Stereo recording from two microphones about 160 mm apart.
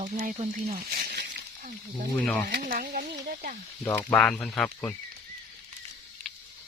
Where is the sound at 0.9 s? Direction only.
90° right.